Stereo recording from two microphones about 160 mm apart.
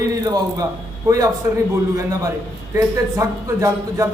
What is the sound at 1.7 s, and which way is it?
A woman's voice, 20° right (ahead or behind).